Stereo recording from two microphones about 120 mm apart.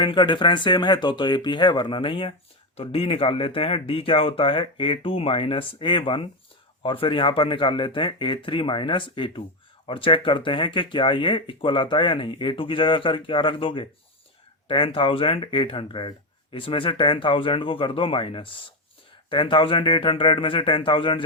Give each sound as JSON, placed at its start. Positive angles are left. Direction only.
{"t": 0.0, "sound": "speech", "side_deg": 40}